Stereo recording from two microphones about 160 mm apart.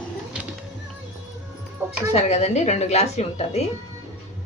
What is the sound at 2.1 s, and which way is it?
Speech, 40° left (ahead or behind).